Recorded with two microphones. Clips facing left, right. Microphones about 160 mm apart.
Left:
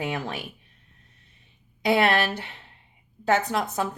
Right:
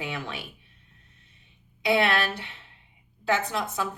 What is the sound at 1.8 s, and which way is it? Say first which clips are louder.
Speech: left 2 dB; 45° left (ahead or behind).